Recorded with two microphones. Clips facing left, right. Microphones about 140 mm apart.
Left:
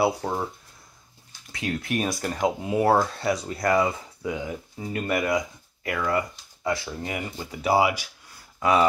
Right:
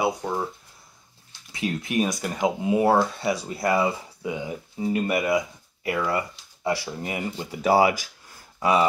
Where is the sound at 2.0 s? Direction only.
Centre (ahead or behind).